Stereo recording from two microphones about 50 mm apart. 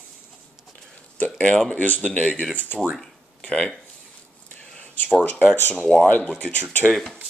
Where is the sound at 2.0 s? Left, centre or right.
Left.